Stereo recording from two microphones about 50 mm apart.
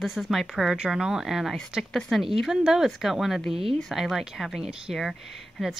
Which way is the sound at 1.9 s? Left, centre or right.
Centre.